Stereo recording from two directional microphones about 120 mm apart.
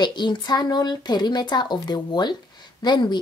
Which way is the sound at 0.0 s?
40° left (ahead or behind).